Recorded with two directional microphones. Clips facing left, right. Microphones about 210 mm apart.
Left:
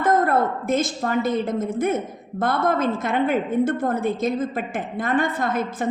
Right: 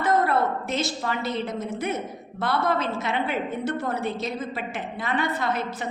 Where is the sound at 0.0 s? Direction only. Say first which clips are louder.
Left 3 dB; 50° left (ahead or behind).